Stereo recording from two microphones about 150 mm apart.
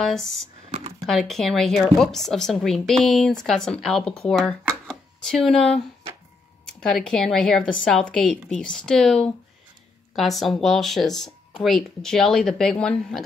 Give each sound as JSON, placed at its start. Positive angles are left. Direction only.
{"t": 0.0, "sound": "a woman's voice", "side_deg": 0}
{"t": 0.7, "sound": "computer keyboard", "side_deg": -50}
{"t": 1.0, "sound": "a woman's voice", "side_deg": 0}